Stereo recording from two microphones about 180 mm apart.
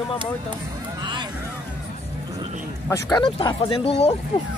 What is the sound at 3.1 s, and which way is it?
Speech, 25° left (ahead or behind).